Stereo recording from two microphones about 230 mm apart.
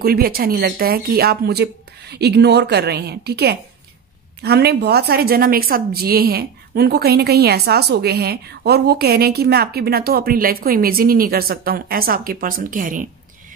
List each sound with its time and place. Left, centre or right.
0.0 s a woman's voice: right